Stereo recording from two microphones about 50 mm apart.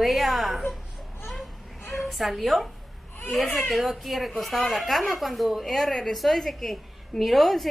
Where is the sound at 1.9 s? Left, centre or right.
Centre.